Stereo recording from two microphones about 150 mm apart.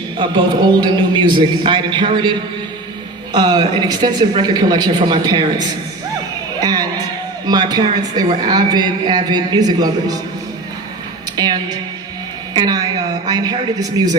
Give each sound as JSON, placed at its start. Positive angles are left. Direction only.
{"t": 0.2, "sound": "a man's voice", "side_deg": -30}
{"t": 3.3, "sound": "a woman's voice", "side_deg": -30}
{"t": 11.3, "sound": "a woman's voice", "side_deg": -25}